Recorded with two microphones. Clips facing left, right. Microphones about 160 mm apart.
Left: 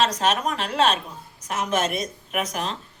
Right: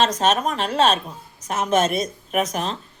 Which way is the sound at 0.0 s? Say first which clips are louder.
Right 3 dB; 30° right (ahead or behind).